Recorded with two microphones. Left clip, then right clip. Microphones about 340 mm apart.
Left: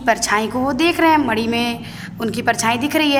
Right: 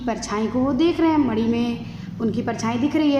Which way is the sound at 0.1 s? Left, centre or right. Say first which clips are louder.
Left 8 dB; left.